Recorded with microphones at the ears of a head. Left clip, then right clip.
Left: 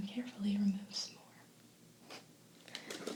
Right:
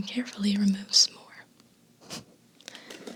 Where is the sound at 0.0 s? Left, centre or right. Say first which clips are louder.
Right 11 dB; right.